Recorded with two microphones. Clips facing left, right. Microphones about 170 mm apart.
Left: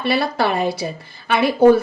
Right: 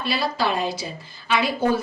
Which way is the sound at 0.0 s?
60° left (ahead or behind).